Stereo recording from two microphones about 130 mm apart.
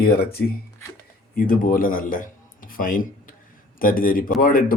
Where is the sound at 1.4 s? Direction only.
90° left.